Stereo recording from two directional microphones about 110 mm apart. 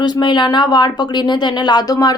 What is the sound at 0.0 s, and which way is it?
Speech, 45° left (ahead or behind).